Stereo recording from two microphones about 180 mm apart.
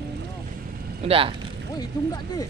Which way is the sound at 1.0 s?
30° right (ahead or behind).